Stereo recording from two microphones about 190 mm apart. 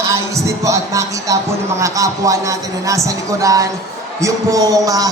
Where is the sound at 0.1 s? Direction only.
15° right (ahead or behind).